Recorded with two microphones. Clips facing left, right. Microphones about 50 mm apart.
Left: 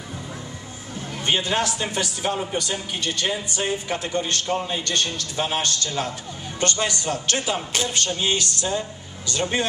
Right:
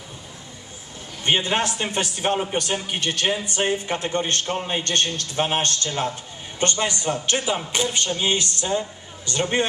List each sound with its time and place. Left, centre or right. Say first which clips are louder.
1.2 s a man's voice: right 1 dB; right